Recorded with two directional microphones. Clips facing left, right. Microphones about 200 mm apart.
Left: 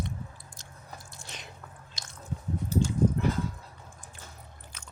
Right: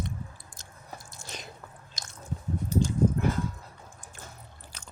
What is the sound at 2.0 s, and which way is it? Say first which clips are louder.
Squish: right 3 dB; 45° right (ahead or behind).